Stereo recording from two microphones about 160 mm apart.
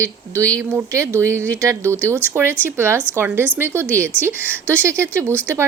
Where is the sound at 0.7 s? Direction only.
15° right (ahead or behind).